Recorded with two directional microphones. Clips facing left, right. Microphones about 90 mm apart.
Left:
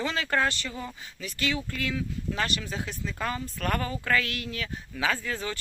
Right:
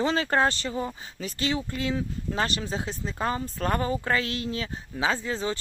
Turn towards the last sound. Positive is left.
turn(degrees=-25)  # may be behind; listen again after turning